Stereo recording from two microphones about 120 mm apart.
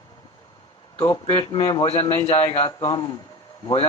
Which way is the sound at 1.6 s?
35° left (ahead or behind).